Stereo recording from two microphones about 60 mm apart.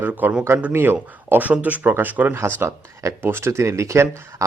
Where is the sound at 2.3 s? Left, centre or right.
Right.